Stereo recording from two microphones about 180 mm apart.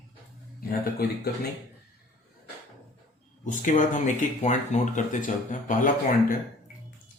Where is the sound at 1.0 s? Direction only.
60° left (ahead or behind).